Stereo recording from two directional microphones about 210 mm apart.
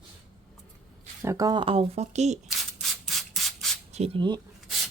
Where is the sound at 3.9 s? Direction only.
25° right (ahead or behind).